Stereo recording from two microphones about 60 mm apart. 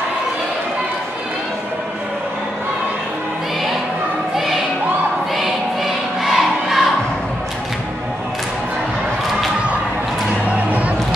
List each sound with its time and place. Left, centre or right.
6.2 s crowd: centre
10.5 s music: right